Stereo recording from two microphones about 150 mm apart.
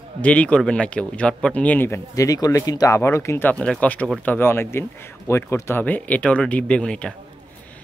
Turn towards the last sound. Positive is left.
turn(degrees=5)  # may be behind; listen again after turning